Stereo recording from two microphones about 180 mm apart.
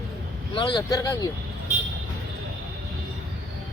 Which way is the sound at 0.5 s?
25° left (ahead or behind).